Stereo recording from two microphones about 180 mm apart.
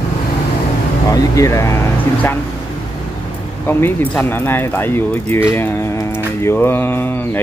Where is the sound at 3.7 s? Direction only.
10° left (ahead or behind).